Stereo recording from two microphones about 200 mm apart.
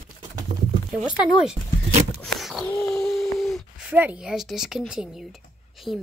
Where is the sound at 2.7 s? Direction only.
5° left (ahead or behind).